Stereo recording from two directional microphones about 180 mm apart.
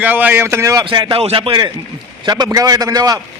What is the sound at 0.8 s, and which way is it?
A man's voice, 25° right (ahead or behind).